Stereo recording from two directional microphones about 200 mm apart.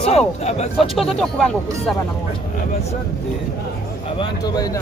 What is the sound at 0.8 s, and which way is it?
Speech, centre (ahead or behind).